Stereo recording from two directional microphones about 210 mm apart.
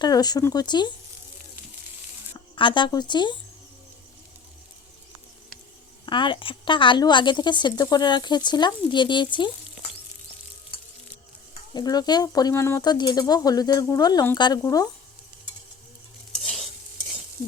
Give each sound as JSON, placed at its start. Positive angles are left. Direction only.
{"t": 0.0, "sound": "a woman's voice", "side_deg": 20}
{"t": 2.6, "sound": "a woman's voice", "side_deg": 25}
{"t": 6.1, "sound": "a woman's voice", "side_deg": 25}
{"t": 11.7, "sound": "speech", "side_deg": 20}
{"t": 16.4, "sound": "stir", "side_deg": 0}